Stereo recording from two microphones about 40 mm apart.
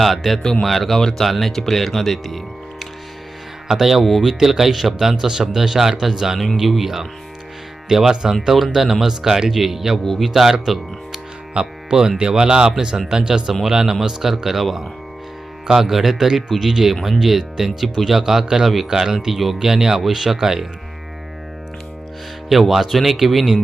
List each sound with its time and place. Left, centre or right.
0.0 s speech: centre
3.7 s speech: centre
10.0 s speech: centre
13.5 s speech: centre
22.4 s speech: centre